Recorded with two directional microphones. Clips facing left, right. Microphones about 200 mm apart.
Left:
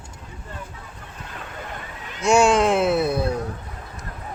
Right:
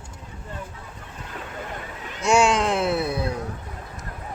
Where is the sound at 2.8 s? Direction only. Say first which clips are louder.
Left 4 dB; 20° left (ahead or behind).